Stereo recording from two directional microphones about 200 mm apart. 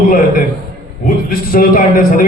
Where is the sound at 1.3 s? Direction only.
45° left (ahead or behind).